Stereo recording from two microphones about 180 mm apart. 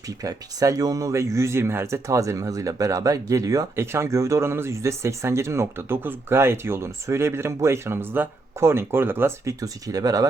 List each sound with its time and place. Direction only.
0.2 s speech: 20° right (ahead or behind)